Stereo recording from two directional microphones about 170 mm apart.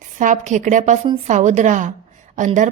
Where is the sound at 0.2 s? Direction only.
45° right (ahead or behind).